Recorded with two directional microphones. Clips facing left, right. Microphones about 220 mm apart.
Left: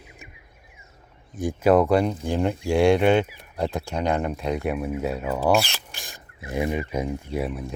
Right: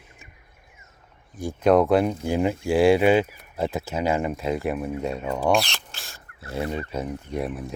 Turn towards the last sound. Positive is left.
turn(degrees=0)  # may be behind; listen again after turning